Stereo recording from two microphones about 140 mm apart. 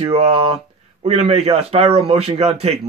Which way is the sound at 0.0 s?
45° right (ahead or behind).